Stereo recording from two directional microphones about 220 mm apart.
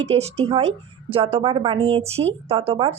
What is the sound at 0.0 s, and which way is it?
A woman's voice, 30° right (ahead or behind).